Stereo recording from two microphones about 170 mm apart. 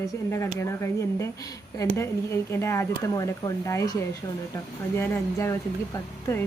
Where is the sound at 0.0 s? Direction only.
15° left (ahead or behind).